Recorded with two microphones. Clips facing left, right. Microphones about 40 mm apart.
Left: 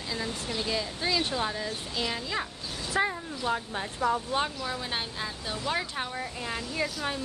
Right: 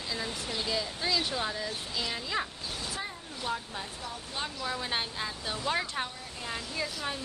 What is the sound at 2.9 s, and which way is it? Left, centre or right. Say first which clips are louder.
Speech: left 15 dB; left.